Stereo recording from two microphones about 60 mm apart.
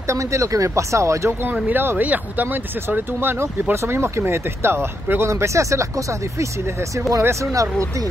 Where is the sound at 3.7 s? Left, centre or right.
Right.